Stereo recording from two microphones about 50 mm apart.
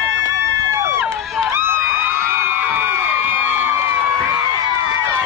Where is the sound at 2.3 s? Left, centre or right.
Right.